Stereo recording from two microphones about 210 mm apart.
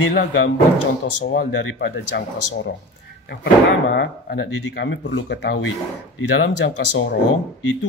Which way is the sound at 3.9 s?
55° left (ahead or behind).